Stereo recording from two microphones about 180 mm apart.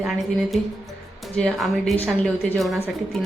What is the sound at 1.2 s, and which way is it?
A woman's voice, centre (ahead or behind).